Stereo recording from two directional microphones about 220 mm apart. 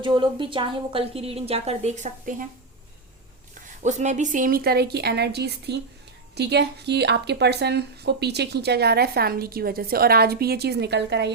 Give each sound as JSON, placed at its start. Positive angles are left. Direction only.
{"t": 0.0, "sound": "a woman's voice", "side_deg": -20}
{"t": 3.8, "sound": "a woman's voice", "side_deg": -35}